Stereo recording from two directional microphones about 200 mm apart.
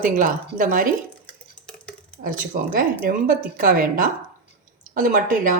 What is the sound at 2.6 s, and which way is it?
A woman's voice, 50° right (ahead or behind).